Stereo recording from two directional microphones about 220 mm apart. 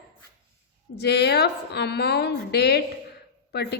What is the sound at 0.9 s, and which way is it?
A woman's voice, 50° left (ahead or behind).